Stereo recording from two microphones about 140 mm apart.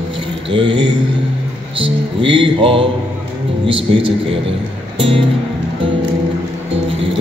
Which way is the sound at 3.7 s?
40° right (ahead or behind).